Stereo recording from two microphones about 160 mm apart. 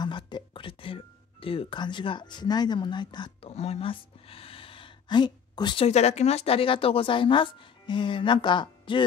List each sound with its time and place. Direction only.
0.0 s music: 30° left (ahead or behind)
3.5 s a sound: 40° left (ahead or behind)
5.9 s a woman's voice: 40° left (ahead or behind)